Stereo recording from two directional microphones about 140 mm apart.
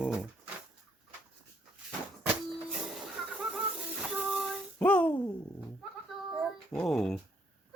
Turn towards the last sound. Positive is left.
turn(degrees=5)  # may be behind; listen again after turning